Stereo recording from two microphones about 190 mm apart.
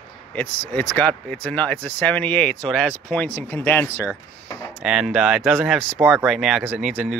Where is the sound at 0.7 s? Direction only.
5° left (ahead or behind).